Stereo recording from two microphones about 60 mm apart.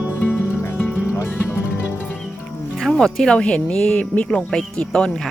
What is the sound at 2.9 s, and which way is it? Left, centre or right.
Speech, centre.